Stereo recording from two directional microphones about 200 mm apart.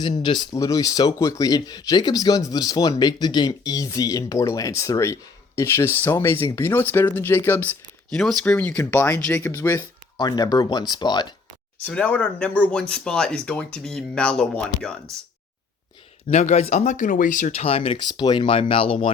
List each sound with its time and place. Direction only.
0.2 s speech: 20° left (ahead or behind)
11.9 s speech: 5° left (ahead or behind)
16.3 s speech: 35° left (ahead or behind)